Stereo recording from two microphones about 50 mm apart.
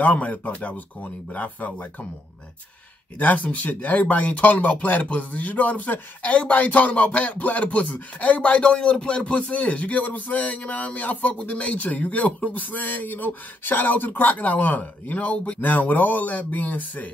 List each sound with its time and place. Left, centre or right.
0.0 s speech: left
3.2 s speech: left